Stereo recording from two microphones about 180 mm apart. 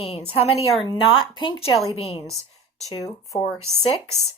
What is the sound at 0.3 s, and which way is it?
Speech, 35° left (ahead or behind).